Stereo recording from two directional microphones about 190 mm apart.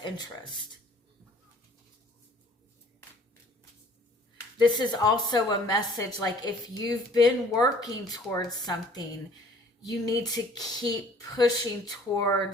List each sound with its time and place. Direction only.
0.0 s a woman's voice: 25° left (ahead or behind)
4.5 s a woman's voice: 25° left (ahead or behind)
10.1 s a woman's voice: 20° left (ahead or behind)